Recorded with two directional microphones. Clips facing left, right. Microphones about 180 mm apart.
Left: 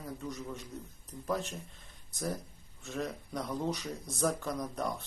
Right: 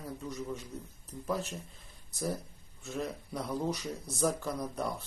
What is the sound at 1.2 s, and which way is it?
Speech, centre (ahead or behind).